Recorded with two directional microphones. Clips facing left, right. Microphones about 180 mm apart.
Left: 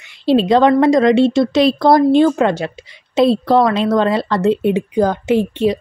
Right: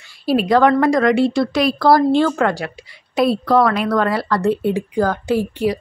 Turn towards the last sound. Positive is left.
turn(degrees=20)  # may be behind; listen again after turning